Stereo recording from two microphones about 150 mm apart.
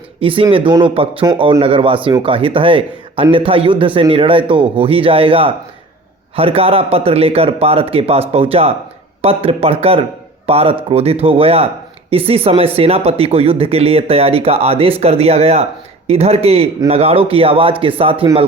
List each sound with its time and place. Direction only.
0.2 s a man's voice: 35° right (ahead or behind)